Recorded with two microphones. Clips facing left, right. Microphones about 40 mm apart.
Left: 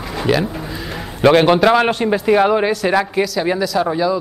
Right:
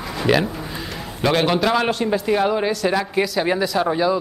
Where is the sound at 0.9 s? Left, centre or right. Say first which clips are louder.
Left 8 dB; left.